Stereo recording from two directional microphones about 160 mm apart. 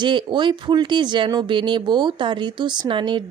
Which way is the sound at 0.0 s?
30° right (ahead or behind).